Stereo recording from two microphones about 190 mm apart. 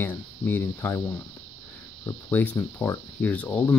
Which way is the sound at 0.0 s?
10° left (ahead or behind).